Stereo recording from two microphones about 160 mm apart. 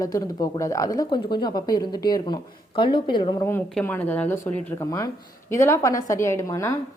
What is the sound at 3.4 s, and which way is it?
Speech, 15° left (ahead or behind).